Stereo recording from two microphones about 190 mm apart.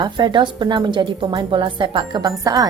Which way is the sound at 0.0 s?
25° right (ahead or behind).